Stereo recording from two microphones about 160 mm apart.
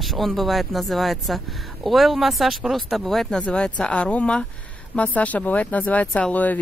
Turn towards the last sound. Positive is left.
turn(degrees=10)  # may be behind; listen again after turning